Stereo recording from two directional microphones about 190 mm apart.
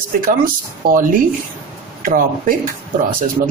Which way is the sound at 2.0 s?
45° right (ahead or behind).